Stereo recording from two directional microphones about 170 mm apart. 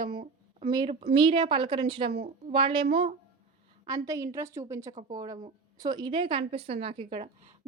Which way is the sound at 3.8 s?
20° right (ahead or behind).